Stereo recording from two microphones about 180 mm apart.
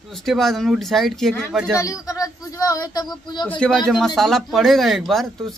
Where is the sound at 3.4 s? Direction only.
5° left (ahead or behind).